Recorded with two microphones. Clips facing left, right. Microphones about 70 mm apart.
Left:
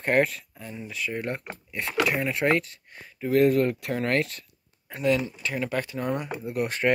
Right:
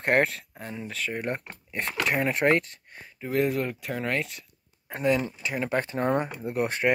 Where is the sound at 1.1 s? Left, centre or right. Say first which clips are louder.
Even; right.